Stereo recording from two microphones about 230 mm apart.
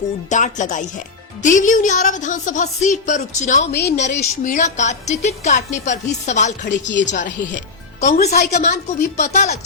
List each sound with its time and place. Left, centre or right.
0.3 s a woman's voice: left
3.7 s a woman's voice: left
3.9 s a woman's voice: left